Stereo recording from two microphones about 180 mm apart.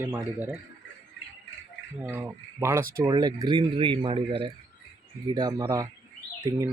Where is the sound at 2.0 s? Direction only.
10° right (ahead or behind).